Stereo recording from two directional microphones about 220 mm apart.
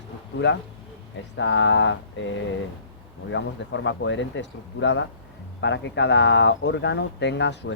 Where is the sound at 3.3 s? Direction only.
55° left (ahead or behind).